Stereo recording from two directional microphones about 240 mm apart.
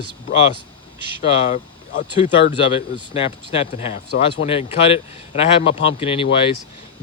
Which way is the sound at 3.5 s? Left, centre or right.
Left.